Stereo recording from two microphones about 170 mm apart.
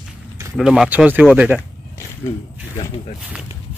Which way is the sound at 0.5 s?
5° right (ahead or behind).